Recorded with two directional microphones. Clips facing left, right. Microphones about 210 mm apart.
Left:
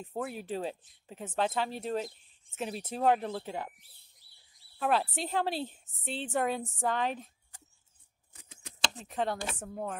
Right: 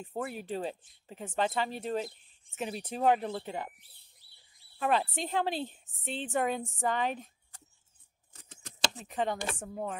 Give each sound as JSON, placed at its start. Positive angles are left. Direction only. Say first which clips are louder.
{"t": 0.0, "sound": "a woman's voice", "louder": "even", "side_deg": 0}
{"t": 4.7, "sound": "a woman's voice", "louder": "even", "side_deg": 0}
{"t": 8.9, "sound": "a woman's voice", "louder": "left 1 dB", "side_deg": 0}